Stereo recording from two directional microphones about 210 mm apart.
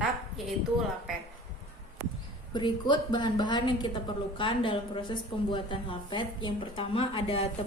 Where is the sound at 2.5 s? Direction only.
20° left (ahead or behind).